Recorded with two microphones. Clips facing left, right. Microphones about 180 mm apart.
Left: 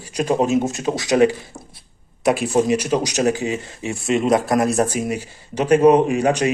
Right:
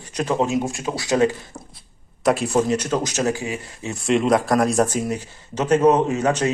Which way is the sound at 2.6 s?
10° left (ahead or behind).